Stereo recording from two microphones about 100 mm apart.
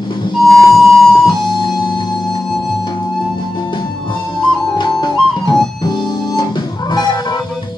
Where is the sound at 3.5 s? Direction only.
45° left (ahead or behind).